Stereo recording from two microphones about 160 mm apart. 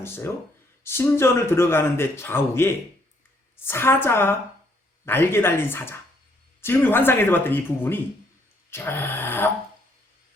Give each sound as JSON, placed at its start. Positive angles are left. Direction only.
{"t": 0.0, "sound": "a man's voice", "side_deg": 15}